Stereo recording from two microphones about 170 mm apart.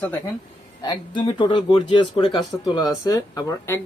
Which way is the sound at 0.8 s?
25° left (ahead or behind).